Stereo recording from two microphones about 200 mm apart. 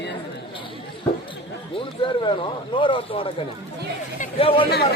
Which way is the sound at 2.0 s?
25° left (ahead or behind).